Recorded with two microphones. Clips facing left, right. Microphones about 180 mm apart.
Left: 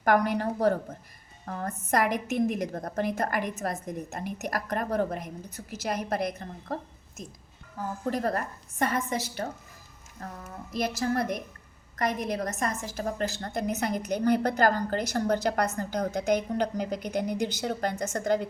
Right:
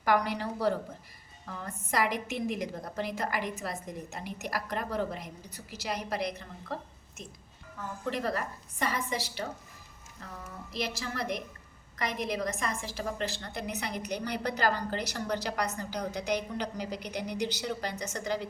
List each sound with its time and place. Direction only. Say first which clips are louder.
0.0 s a woman's voice: left 4 dB; 50° left (ahead or behind)